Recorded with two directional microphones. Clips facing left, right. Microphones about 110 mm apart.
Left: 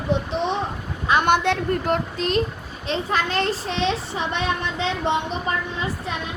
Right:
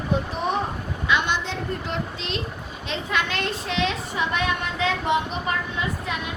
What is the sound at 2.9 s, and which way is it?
A child's voice, 35° left (ahead or behind).